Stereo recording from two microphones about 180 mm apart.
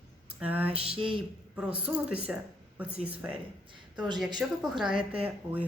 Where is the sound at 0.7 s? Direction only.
30° right (ahead or behind).